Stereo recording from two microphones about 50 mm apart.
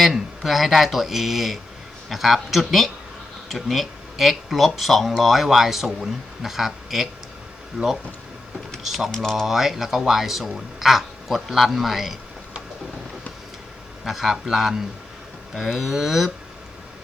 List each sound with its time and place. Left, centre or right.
0.0 s speech: centre
14.0 s speech: centre